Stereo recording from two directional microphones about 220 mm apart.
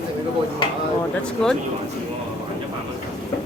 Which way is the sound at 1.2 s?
5° left (ahead or behind).